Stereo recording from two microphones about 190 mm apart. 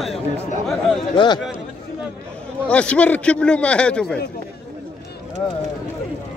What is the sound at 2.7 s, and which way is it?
A man's voice, 5° left (ahead or behind).